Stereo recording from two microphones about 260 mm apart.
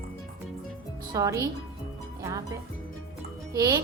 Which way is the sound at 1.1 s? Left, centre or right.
Centre.